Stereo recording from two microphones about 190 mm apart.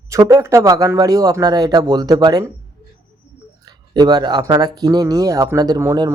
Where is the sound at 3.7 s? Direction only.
20° right (ahead or behind).